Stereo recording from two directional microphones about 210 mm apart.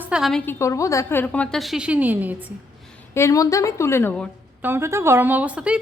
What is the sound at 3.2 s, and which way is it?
A woman's voice, 15° left (ahead or behind).